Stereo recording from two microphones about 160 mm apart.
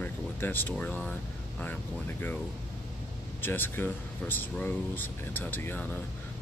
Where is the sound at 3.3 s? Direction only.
15° left (ahead or behind).